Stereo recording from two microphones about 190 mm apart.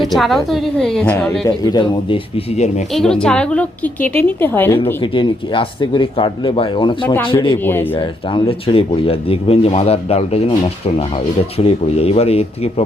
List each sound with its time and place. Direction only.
0.0 s a woman's voice: centre (ahead or behind)
1.6 s speech: 25° left (ahead or behind)
2.9 s a woman's voice: 5° left (ahead or behind)
5.1 s speech: 25° left (ahead or behind)
7.6 s a woman's voice: 10° left (ahead or behind)
7.9 s speech: 30° left (ahead or behind)